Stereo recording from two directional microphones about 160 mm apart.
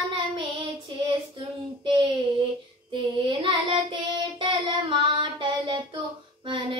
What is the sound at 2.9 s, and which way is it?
Child singing, 30° right (ahead or behind).